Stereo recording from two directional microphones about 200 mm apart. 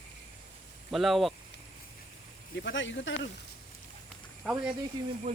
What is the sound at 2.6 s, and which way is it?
Speech, 70° left (ahead or behind).